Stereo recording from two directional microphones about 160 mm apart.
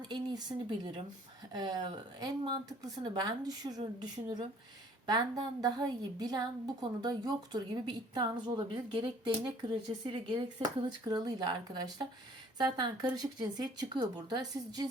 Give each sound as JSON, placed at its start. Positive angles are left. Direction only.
{"t": 0.1, "sound": "a woman's voice", "side_deg": -30}